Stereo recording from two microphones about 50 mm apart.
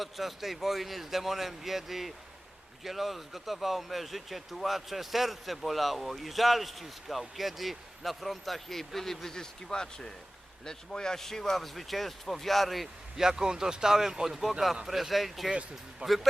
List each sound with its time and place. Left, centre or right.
0.0 s speech: centre
13.2 s speech: centre
16.0 s a man's voice: right